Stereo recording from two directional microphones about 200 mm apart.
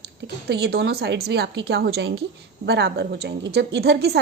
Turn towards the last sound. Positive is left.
turn(degrees=-55)  # may be behind; listen again after turning